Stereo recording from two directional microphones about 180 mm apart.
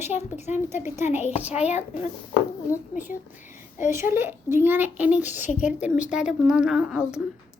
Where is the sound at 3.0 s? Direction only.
10° right (ahead or behind).